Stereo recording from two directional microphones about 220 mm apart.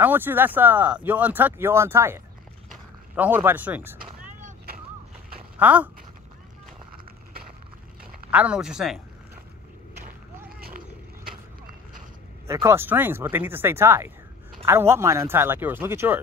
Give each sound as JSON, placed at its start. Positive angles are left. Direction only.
{"t": 0.0, "sound": "speech", "side_deg": -10}
{"t": 4.3, "sound": "vehicle", "side_deg": -35}
{"t": 5.6, "sound": "speech", "side_deg": -5}
{"t": 8.0, "sound": "speech", "side_deg": -5}
{"t": 12.4, "sound": "speech", "side_deg": -15}